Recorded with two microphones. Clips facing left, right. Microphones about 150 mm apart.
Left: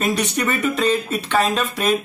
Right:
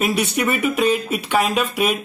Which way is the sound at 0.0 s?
10° right (ahead or behind).